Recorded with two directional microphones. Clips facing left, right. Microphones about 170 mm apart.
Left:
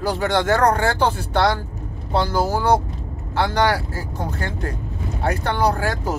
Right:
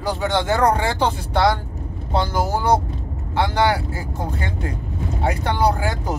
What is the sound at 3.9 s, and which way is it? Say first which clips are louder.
Speech: right 1 dB; 15° right (ahead or behind).